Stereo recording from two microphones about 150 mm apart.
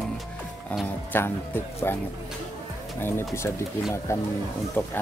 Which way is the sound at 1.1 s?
15° left (ahead or behind).